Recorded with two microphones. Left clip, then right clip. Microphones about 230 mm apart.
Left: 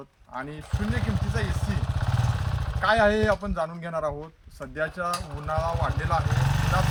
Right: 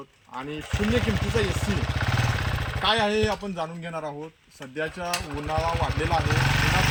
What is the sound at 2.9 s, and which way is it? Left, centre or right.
A man's voice, centre.